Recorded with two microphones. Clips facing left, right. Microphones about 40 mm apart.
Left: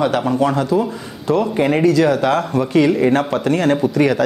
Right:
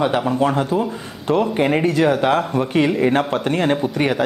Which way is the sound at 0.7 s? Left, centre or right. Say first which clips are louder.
Left 3 dB; right.